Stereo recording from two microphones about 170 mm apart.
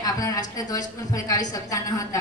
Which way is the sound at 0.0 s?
20° left (ahead or behind).